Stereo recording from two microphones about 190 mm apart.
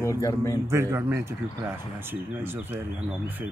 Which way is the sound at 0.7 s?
15° right (ahead or behind).